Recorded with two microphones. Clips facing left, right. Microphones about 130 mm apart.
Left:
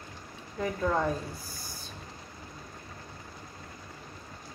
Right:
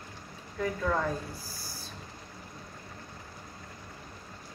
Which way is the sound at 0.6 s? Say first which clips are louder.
Left 1 dB; 20° left (ahead or behind).